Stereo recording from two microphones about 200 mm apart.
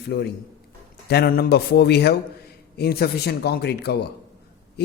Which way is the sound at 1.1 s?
55° left (ahead or behind).